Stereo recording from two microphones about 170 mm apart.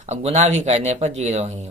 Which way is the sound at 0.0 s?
40° right (ahead or behind).